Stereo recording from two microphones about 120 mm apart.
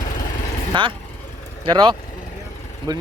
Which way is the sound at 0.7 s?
45° right (ahead or behind).